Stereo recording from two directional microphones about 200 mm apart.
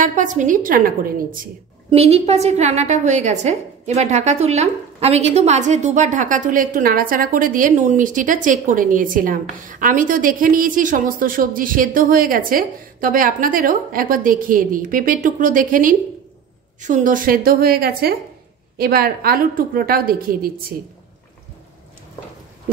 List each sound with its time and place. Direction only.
0.0 s a woman's voice: 40° right (ahead or behind)
1.9 s a woman's voice: 30° right (ahead or behind); by 20.5 s 45° right (ahead or behind)